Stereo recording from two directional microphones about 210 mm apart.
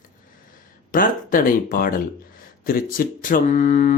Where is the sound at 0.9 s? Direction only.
40° left (ahead or behind).